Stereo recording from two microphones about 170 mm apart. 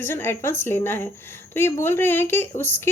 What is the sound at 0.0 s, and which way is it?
Speech, 15° left (ahead or behind).